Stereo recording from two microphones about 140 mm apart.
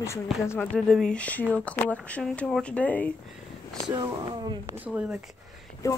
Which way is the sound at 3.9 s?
30° right (ahead or behind).